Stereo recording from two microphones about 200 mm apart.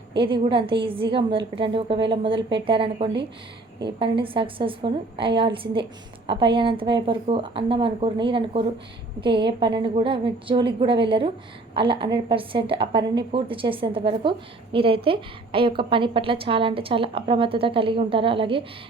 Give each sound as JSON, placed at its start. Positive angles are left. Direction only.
{"t": 0.2, "sound": "a woman's voice", "side_deg": -25}